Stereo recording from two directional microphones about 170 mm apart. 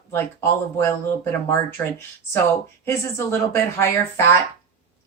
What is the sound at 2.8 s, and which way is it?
A woman's voice, 15° left (ahead or behind).